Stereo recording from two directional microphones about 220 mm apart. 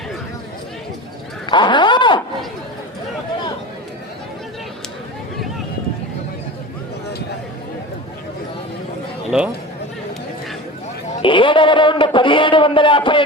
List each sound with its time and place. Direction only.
1.5 s speech: 20° left (ahead or behind)
9.3 s speech: 5° right (ahead or behind)
11.2 s a sound: 20° left (ahead or behind)